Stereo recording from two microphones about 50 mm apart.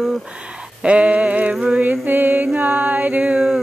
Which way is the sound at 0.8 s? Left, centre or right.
Right.